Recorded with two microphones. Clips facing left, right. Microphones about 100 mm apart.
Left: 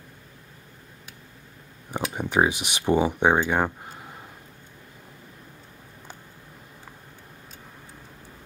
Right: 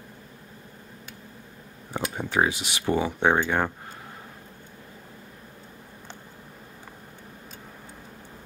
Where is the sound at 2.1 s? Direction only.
15° left (ahead or behind).